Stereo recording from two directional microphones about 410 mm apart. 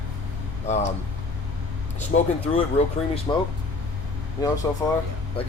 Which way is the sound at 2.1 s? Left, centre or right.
Centre.